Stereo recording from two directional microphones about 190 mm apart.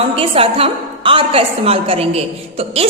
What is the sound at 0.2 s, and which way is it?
A woman's voice, 30° right (ahead or behind).